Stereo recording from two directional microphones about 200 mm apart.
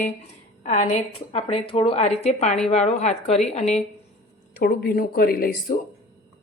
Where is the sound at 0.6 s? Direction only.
35° left (ahead or behind).